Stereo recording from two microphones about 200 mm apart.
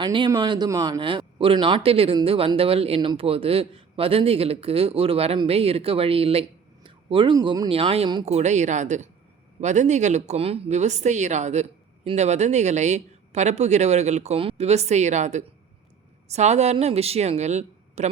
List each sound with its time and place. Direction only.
0.0 s speech: 20° right (ahead or behind)